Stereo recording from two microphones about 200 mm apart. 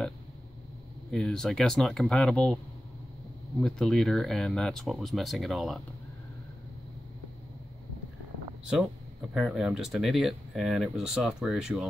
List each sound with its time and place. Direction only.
1.1 s speech: 5° left (ahead or behind)
3.6 s speech: centre (ahead or behind)
9.3 s speech: centre (ahead or behind)